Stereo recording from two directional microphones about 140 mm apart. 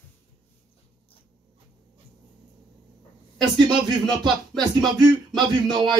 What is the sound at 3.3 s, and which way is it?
Speech, 30° right (ahead or behind).